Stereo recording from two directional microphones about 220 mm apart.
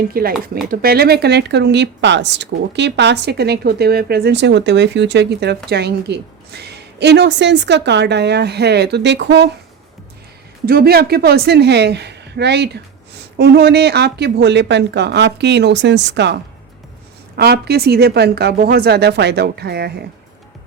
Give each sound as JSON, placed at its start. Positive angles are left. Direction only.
{"t": 0.1, "sound": "speech", "side_deg": -40}
{"t": 10.7, "sound": "speech", "side_deg": -45}